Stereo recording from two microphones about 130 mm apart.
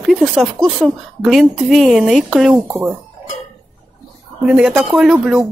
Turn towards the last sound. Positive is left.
turn(degrees=-5)  # may be behind; listen again after turning